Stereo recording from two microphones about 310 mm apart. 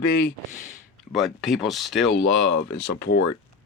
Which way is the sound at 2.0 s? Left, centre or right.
Left.